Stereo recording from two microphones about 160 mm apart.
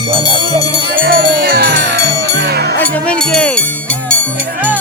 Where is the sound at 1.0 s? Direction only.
65° right (ahead or behind); by 2.8 s 85° right.